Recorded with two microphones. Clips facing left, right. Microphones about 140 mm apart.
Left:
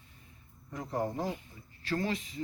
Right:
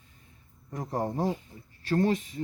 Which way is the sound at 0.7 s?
35° right (ahead or behind).